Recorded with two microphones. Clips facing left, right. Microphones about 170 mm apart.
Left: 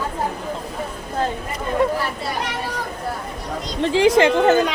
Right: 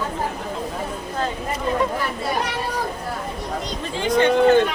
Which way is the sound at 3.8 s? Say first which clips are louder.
Left 5 dB; 90° left.